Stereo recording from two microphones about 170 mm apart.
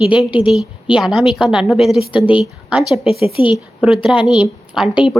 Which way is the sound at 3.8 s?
5° right (ahead or behind).